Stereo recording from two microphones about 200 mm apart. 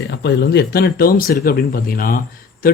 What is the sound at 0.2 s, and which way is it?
Speech, 55° left (ahead or behind).